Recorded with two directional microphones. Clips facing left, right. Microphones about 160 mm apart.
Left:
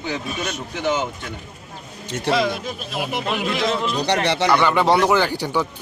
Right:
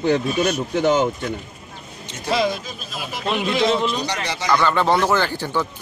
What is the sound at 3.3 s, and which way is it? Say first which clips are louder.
Speech: right 5 dB; centre (ahead or behind).